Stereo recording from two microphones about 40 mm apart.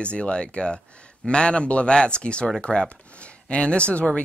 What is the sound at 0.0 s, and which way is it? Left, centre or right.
Speech, left.